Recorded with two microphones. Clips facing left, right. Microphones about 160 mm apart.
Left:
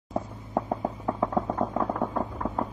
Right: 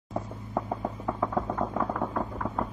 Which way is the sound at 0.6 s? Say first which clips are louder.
Left 3 dB; 15° left (ahead or behind).